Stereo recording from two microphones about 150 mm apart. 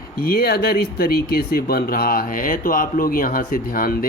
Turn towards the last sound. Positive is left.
turn(degrees=75)  # may be behind; listen again after turning